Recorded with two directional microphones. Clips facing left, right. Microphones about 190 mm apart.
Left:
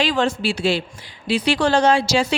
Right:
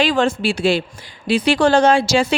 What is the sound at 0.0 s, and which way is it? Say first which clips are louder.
A woman's voice: right 3 dB; 50° right (ahead or behind).